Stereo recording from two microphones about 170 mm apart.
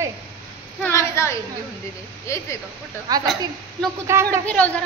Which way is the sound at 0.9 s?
15° left (ahead or behind).